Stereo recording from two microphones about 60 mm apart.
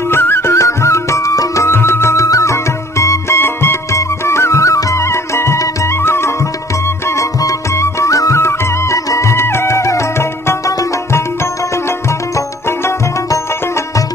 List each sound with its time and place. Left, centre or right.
0.1 s music: left
1.7 s music: left
3.3 s music: left
3.9 s music: left
7.2 s music: left